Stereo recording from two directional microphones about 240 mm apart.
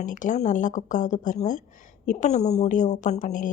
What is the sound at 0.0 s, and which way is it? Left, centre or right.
Speech, left.